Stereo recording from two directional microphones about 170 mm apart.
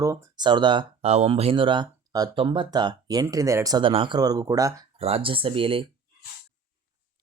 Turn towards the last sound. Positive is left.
turn(degrees=-30)  # may be behind; listen again after turning